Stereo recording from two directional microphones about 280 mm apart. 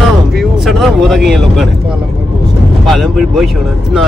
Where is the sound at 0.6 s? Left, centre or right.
Centre.